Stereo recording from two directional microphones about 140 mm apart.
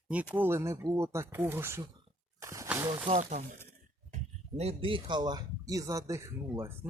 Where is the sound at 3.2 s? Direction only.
55° right (ahead or behind).